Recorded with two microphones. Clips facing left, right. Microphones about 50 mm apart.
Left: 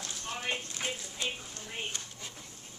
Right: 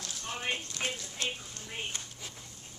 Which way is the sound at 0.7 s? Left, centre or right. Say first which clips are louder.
Right 1 dB; centre.